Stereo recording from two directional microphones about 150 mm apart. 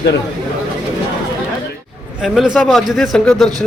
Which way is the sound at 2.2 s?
5° right (ahead or behind).